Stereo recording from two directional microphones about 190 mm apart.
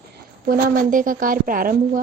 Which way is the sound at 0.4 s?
50° right (ahead or behind).